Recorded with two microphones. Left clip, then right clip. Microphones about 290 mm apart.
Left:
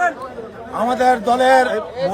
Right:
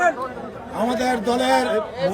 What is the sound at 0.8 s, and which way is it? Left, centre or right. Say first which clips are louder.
Speech: left 6 dB; centre.